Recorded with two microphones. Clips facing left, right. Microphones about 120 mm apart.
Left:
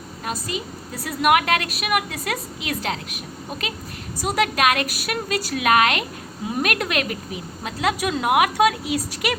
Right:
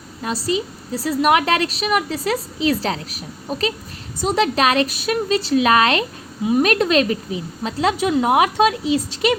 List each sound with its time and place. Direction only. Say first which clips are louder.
0.9 s a woman's voice: right 2 dB; 30° right (ahead or behind)